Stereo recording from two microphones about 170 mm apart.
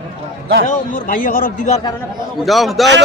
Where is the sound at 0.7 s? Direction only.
55° left (ahead or behind).